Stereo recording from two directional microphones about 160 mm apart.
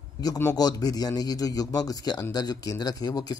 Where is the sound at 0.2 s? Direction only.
20° left (ahead or behind).